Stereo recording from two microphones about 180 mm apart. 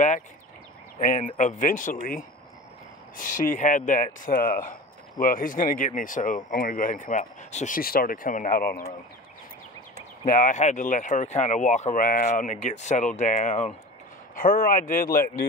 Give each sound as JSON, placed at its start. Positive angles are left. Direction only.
{"t": 0.9, "sound": "speech", "side_deg": 45}
{"t": 3.2, "sound": "speech", "side_deg": 45}
{"t": 9.9, "sound": "speech", "side_deg": 50}
{"t": 14.3, "sound": "speech", "side_deg": 50}